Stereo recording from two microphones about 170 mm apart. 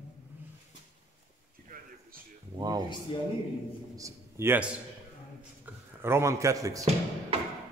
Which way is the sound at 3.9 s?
15° right (ahead or behind).